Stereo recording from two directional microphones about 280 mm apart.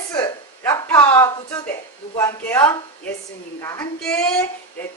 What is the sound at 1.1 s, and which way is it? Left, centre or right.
A woman's voice, centre.